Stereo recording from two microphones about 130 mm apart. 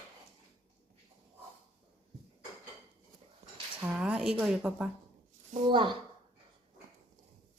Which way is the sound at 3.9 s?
5° right (ahead or behind).